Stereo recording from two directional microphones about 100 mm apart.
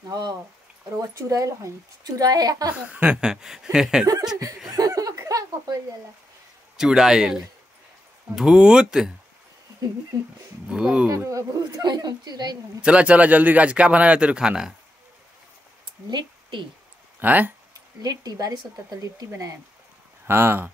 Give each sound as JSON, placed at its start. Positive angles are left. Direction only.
{"t": 0.1, "sound": "speech", "side_deg": -40}
{"t": 2.7, "sound": "a man's voice", "side_deg": -10}
{"t": 4.7, "sound": "chuckle", "side_deg": -35}
{"t": 6.8, "sound": "a man's voice", "side_deg": -5}
{"t": 10.7, "sound": "a man's voice", "side_deg": -10}
{"t": 11.1, "sound": "speech", "side_deg": -30}
{"t": 11.8, "sound": "speech", "side_deg": -45}
{"t": 12.8, "sound": "a man's voice", "side_deg": -15}
{"t": 16.1, "sound": "a woman's voice", "side_deg": -50}
{"t": 17.2, "sound": "a man's voice", "side_deg": -15}
{"t": 17.7, "sound": "speech", "side_deg": -40}
{"t": 20.2, "sound": "speech", "side_deg": -25}